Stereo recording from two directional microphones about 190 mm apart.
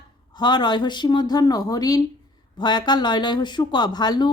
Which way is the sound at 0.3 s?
20° left (ahead or behind).